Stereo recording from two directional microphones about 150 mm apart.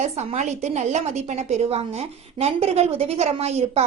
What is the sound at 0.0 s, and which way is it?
A woman's voice, 50° right (ahead or behind).